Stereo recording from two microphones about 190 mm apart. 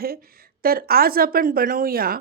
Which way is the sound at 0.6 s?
50° right (ahead or behind).